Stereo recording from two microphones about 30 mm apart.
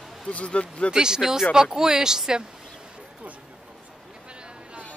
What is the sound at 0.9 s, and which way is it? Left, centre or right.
Speech, right.